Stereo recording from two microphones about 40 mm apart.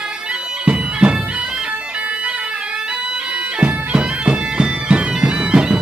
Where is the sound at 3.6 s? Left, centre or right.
Right.